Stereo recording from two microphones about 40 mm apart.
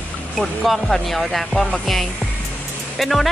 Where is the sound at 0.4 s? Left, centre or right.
Centre.